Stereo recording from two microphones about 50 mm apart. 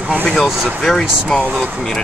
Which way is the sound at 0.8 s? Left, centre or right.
Centre.